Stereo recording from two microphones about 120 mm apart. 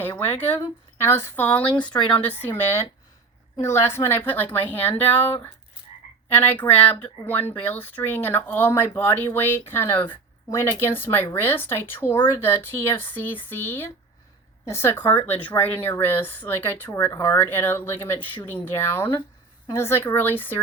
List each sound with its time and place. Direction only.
0.0 s speech: 15° left (ahead or behind)
1.7 s speech: 40° left (ahead or behind)
2.2 s speech: 15° left (ahead or behind)